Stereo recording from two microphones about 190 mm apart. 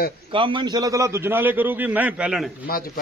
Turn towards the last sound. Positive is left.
turn(degrees=50)  # may be behind; listen again after turning